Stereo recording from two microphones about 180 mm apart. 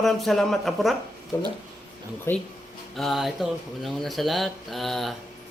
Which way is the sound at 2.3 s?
15° left (ahead or behind).